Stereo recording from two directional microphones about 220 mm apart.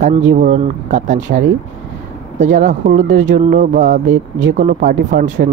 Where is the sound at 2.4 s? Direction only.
35° right (ahead or behind).